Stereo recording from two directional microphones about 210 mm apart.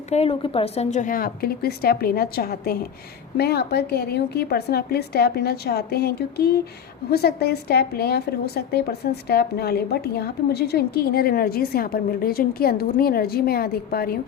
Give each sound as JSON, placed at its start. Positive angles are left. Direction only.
{"t": 0.1, "sound": "a woman's voice", "side_deg": 30}